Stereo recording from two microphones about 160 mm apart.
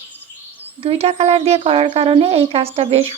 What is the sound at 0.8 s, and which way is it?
Speech, 40° right (ahead or behind).